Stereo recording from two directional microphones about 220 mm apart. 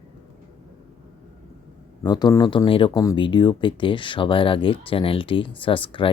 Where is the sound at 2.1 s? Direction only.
20° left (ahead or behind).